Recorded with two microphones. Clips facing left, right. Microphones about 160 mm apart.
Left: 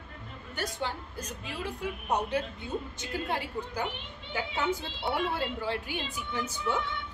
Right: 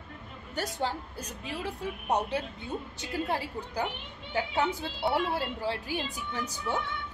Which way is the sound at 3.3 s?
35° right (ahead or behind).